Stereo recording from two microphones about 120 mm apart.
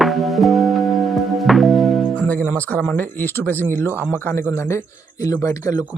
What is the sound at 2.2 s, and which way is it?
Music, 10° left (ahead or behind).